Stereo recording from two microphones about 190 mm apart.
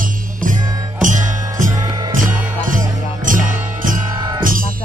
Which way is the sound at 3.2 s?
45° right (ahead or behind).